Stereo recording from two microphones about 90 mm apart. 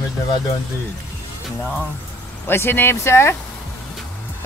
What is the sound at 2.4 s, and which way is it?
Speech, 25° left (ahead or behind).